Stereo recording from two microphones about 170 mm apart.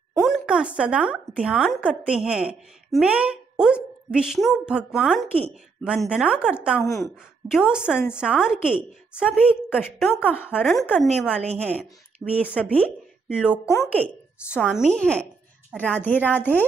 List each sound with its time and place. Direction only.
0.2 s a woman's voice: 5° right (ahead or behind)
10.3 s a woman's voice: 10° left (ahead or behind)
13.3 s a woman's voice: 5° right (ahead or behind)
13.7 s a woman's voice: 10° left (ahead or behind)
14.5 s a woman's voice: centre (ahead or behind)